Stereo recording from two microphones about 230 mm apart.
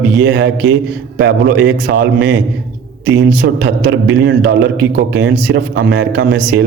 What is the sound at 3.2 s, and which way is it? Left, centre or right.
A man's voice, right.